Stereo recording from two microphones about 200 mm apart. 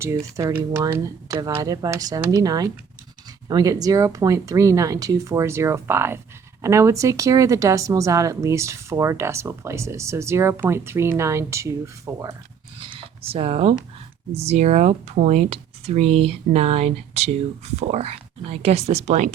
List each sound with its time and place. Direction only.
0.3 s speech: 15° right (ahead or behind)
12.8 s a sound: 25° right (ahead or behind)
14.4 s speech: 35° right (ahead or behind)